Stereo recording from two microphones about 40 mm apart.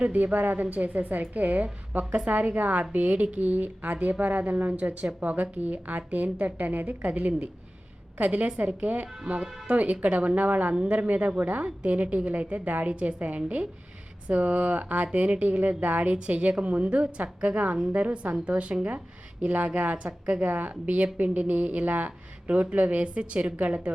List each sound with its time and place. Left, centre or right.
0.0 s a woman's voice: right
9.3 s speech: right
9.6 s speech: right